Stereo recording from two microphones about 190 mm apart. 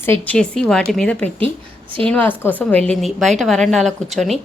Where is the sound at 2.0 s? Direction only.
10° left (ahead or behind).